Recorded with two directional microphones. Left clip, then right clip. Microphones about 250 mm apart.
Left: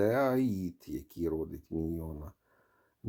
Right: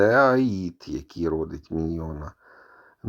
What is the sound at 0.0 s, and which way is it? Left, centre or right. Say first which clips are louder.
Speech: right 11 dB; centre.